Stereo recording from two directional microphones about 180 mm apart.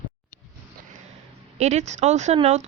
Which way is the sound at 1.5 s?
40° right (ahead or behind).